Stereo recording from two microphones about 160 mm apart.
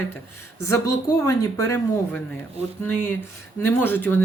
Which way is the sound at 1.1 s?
15° left (ahead or behind).